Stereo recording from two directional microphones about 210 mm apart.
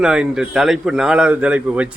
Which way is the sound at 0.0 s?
5° right (ahead or behind).